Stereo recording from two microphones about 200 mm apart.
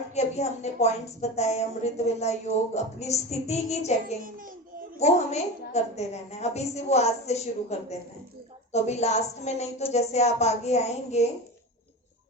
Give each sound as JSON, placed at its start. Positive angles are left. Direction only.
{"t": 0.1, "sound": "a woman's voice", "side_deg": 35}
{"t": 4.2, "sound": "a child's voice", "side_deg": -45}
{"t": 4.9, "sound": "a woman's voice", "side_deg": 35}